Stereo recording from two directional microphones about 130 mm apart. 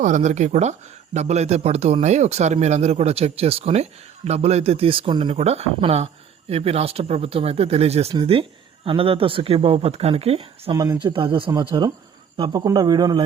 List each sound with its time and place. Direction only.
0.0 s speech: 65° right (ahead or behind); by 5.4 s 45° right (ahead or behind)
5.4 s speech: 55° right (ahead or behind); by 13.2 s 30° right (ahead or behind)